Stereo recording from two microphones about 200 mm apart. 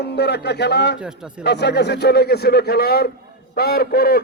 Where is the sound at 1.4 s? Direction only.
55° left (ahead or behind).